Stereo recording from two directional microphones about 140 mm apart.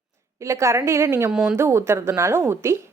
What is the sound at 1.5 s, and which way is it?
Speech, 20° right (ahead or behind).